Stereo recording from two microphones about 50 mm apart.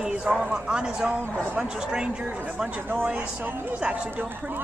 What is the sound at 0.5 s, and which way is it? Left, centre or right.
Speech, centre.